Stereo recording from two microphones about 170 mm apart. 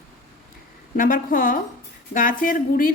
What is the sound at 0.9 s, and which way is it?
A woman's voice, 55° left (ahead or behind).